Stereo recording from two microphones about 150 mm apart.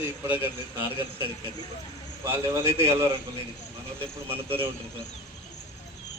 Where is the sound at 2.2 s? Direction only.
15° right (ahead or behind).